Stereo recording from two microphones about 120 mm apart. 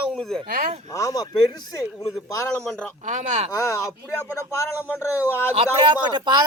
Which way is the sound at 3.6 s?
25° left (ahead or behind).